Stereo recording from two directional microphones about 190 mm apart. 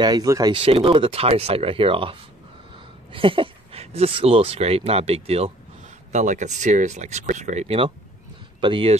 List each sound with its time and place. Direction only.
0.0 s speech: 20° right (ahead or behind)